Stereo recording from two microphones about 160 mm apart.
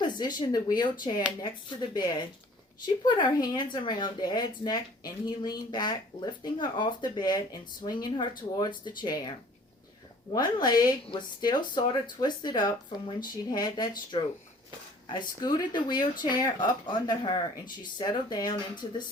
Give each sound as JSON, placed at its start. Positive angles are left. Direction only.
{"t": 0.0, "sound": "speech", "side_deg": 25}
{"t": 10.3, "sound": "speech", "side_deg": 25}